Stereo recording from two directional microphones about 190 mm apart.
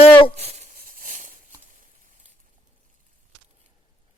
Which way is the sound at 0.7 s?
50° right (ahead or behind).